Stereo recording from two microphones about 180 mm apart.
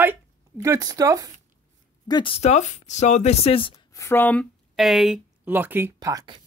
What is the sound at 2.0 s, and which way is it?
Speech, 25° left (ahead or behind).